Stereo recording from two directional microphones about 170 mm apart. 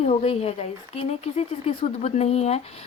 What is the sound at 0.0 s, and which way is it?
A woman's voice, 40° left (ahead or behind).